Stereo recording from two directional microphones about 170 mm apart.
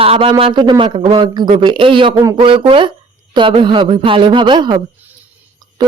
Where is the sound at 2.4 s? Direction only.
30° right (ahead or behind).